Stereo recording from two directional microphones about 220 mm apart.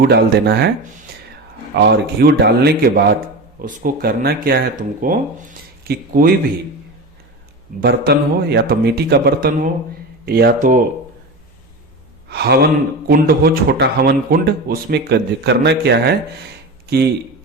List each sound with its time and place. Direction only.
0.0 s a man's voice: 50° right (ahead or behind)
1.9 s a man's voice: 45° right (ahead or behind)
7.8 s a man's voice: 45° right (ahead or behind)
12.3 s a man's voice: 50° right (ahead or behind)